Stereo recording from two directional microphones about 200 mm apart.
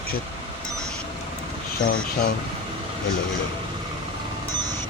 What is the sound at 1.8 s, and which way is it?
Speech, 50° left (ahead or behind).